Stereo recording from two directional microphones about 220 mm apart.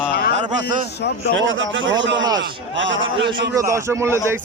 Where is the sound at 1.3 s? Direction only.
60° right (ahead or behind).